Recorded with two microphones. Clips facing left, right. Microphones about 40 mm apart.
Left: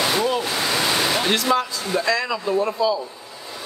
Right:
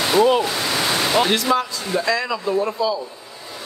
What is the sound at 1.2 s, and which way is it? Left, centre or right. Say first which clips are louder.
Speech: right 1 dB; centre.